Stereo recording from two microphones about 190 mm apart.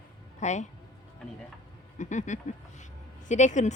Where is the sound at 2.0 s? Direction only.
40° left (ahead or behind).